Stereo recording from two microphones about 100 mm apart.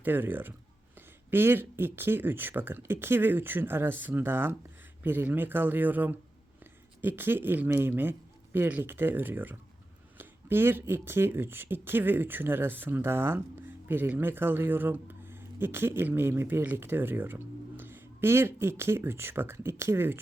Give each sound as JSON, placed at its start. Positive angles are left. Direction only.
{"t": 0.0, "sound": "speech", "side_deg": -20}